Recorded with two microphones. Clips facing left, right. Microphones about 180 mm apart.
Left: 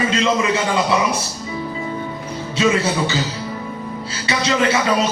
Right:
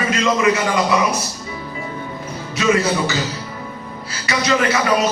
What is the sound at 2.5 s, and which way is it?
Speech, 25° left (ahead or behind).